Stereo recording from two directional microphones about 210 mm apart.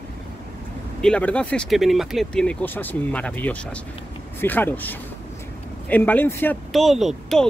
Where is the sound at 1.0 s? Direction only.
5° left (ahead or behind).